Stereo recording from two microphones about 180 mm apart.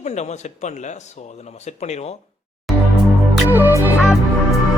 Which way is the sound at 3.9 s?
Centre (ahead or behind).